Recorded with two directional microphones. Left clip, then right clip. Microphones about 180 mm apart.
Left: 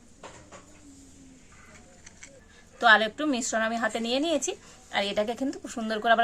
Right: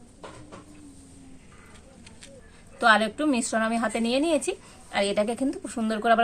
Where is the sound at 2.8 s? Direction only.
15° left (ahead or behind).